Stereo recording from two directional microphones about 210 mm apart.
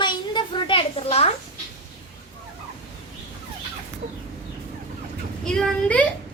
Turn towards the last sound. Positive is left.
turn(degrees=5)  # may be behind; listen again after turning